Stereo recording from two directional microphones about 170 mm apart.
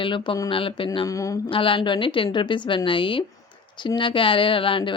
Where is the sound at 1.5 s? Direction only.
30° left (ahead or behind).